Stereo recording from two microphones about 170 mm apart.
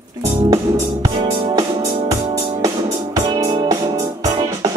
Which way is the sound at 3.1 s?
20° right (ahead or behind).